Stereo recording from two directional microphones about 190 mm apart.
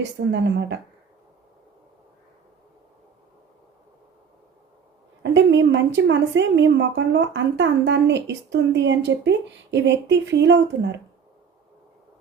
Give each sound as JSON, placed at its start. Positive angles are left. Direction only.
{"t": 0.0, "sound": "a woman's voice", "side_deg": -70}
{"t": 5.2, "sound": "a woman's voice", "side_deg": -70}